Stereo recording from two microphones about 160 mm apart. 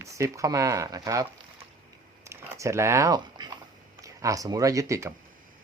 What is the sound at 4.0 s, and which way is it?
Speech, 20° right (ahead or behind).